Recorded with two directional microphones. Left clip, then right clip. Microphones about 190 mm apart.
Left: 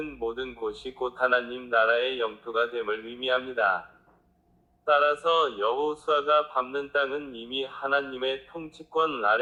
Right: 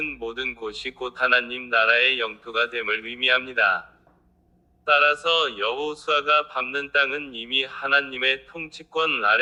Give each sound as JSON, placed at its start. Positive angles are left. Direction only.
{"t": 0.3, "sound": "a man's voice", "side_deg": -40}
{"t": 4.9, "sound": "a man's voice", "side_deg": -40}